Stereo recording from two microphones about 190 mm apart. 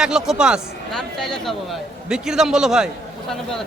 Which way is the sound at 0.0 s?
5° right (ahead or behind).